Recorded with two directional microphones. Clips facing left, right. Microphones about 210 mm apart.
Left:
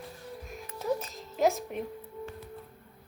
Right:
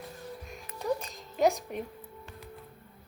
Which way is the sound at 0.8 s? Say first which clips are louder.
Even; 5° left (ahead or behind).